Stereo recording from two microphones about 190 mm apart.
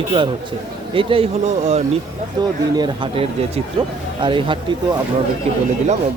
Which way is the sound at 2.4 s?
20° right (ahead or behind).